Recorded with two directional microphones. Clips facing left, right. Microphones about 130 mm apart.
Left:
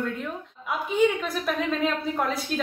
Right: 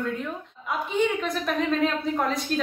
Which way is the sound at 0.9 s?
5° left (ahead or behind).